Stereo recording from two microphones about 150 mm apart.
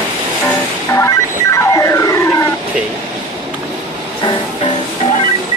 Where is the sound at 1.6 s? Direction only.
20° left (ahead or behind).